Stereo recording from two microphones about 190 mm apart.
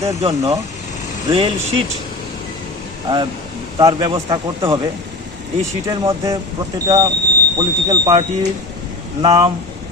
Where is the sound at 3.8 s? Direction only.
20° right (ahead or behind).